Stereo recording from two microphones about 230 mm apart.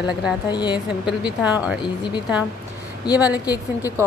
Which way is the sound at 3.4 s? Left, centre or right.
Centre.